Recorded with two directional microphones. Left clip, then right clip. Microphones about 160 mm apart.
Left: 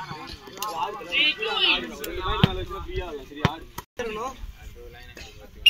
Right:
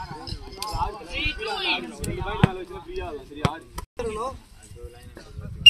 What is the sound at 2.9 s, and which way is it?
Speech, centre (ahead or behind).